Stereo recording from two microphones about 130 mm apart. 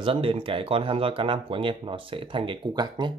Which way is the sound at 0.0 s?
45° right (ahead or behind).